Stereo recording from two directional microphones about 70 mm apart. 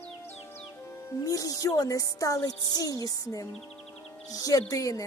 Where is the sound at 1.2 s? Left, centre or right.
Left.